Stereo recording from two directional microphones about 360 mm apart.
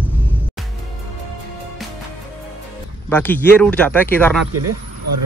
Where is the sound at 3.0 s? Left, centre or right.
Centre.